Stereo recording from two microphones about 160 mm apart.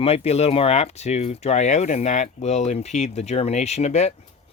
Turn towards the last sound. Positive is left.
turn(degrees=45)  # may be behind; listen again after turning